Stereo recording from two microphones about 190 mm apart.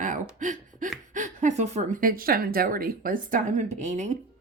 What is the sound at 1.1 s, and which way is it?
A woman's voice, 40° right (ahead or behind).